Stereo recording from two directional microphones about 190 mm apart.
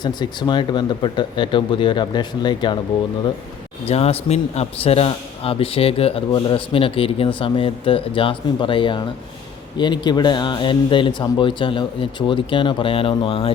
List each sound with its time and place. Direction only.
0.0 s a man's voice: 20° left (ahead or behind)
3.8 s a man's voice: 30° left (ahead or behind)